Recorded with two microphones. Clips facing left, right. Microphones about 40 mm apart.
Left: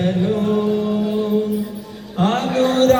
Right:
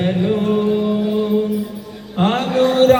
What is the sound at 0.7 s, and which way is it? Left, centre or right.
Music, right.